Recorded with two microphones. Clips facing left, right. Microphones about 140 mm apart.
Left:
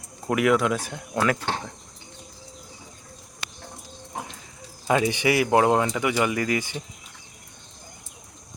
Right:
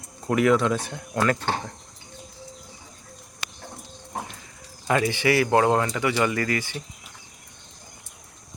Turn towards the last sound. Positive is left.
turn(degrees=15)  # may be behind; listen again after turning